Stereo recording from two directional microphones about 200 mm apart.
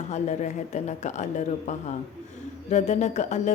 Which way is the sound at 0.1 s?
35° left (ahead or behind).